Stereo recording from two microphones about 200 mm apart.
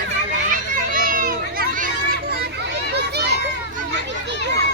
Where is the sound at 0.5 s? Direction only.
45° right (ahead or behind).